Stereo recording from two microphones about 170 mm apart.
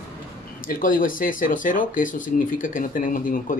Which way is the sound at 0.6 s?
50° left (ahead or behind).